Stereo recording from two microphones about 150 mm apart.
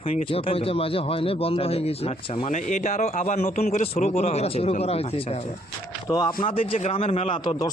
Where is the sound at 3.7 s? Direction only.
75° left (ahead or behind).